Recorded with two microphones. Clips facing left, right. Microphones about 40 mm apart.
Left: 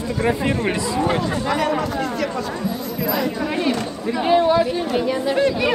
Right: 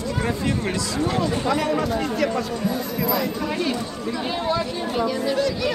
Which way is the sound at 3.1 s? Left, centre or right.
Left.